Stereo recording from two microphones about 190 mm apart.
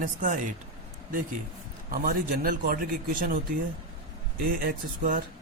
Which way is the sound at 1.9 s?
50° right (ahead or behind).